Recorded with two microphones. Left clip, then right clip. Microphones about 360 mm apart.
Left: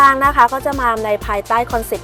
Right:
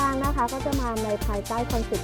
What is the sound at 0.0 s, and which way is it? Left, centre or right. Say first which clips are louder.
Speech: left 15 dB; centre.